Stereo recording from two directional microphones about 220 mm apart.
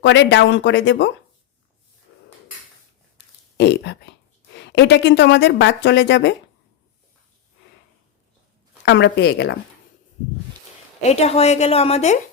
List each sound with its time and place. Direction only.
0.0 s speech: 55° left (ahead or behind)
3.6 s speech: 50° left (ahead or behind)
8.8 s speech: 50° left (ahead or behind)
11.0 s a woman's voice: 30° left (ahead or behind)